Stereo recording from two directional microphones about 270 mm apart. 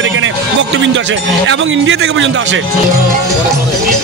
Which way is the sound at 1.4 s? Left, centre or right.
Right.